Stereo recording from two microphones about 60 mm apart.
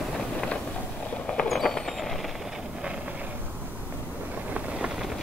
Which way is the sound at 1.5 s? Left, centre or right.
Centre.